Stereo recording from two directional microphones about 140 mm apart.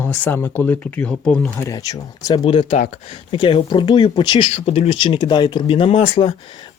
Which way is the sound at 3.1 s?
40° left (ahead or behind).